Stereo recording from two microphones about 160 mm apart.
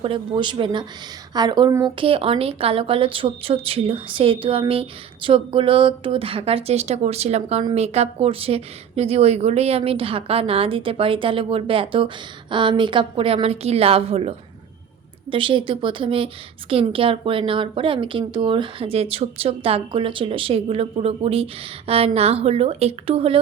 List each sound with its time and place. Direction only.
0.0 s a woman's voice: 30° right (ahead or behind)